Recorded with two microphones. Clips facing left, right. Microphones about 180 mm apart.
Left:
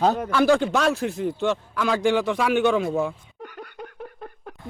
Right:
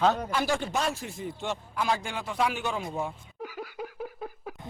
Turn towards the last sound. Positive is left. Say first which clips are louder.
# right 1 dB
turn(degrees=-5)  # may be behind; listen again after turning